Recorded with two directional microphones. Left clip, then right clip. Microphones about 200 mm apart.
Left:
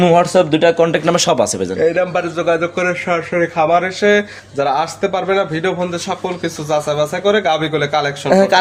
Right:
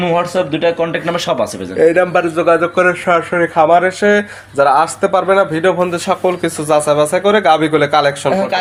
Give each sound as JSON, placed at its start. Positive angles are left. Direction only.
{"t": 0.0, "sound": "speech", "side_deg": 65}
{"t": 1.8, "sound": "speech", "side_deg": -20}
{"t": 2.3, "sound": "a man's voice", "side_deg": -10}
{"t": 5.9, "sound": "speech", "side_deg": -25}
{"t": 8.3, "sound": "speech", "side_deg": 60}